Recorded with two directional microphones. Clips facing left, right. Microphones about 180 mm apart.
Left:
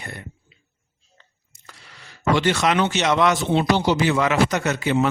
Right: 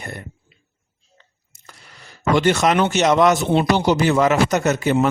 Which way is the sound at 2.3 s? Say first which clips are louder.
Right 3 dB; 45° right (ahead or behind).